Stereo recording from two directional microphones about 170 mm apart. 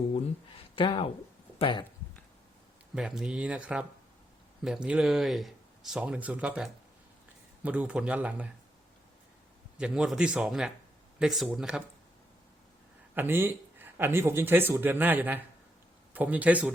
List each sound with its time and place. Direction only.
0.8 s speech: 30° left (ahead or behind)
2.9 s speech: 5° right (ahead or behind)
9.7 s speech: 5° right (ahead or behind)
13.1 s speech: 15° right (ahead or behind)